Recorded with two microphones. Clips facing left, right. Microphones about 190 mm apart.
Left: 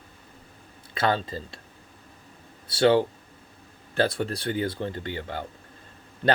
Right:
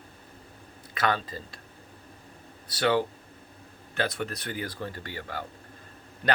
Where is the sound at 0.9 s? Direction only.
30° left (ahead or behind).